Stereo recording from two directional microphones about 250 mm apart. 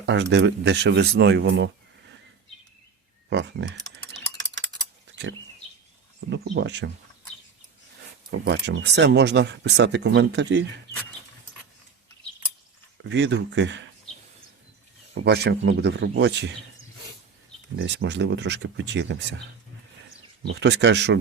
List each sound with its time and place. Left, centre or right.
0.0 s speech: right
3.2 s speech: right
6.1 s speech: right
8.3 s speech: right
13.1 s speech: right
15.1 s speech: right
17.7 s speech: right
20.5 s speech: right